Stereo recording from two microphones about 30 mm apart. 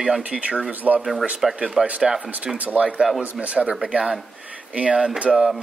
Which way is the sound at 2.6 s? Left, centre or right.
Right.